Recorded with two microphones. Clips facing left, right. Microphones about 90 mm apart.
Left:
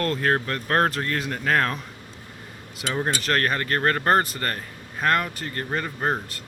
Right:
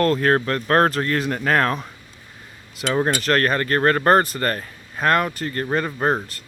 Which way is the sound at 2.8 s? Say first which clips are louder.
Right 5 dB; 75° right (ahead or behind).